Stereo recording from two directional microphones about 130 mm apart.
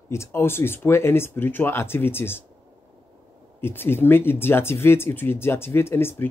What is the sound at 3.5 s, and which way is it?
Speech, 15° left (ahead or behind).